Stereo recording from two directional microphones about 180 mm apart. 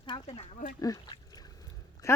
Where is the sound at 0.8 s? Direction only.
20° left (ahead or behind).